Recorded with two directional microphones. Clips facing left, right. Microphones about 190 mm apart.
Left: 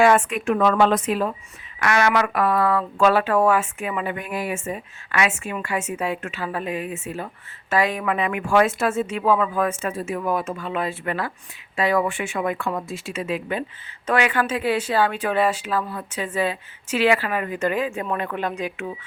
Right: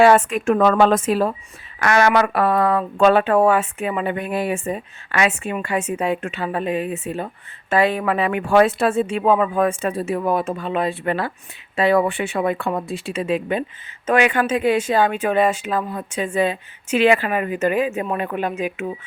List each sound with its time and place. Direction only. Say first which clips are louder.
0.0 s speech: right 3 dB; 30° right (ahead or behind)
0.3 s speech: right 3 dB; 45° right (ahead or behind); by 18.5 s 15° right (ahead or behind)